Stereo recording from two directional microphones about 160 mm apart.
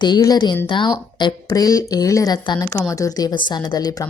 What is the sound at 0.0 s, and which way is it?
A woman's voice, 25° left (ahead or behind).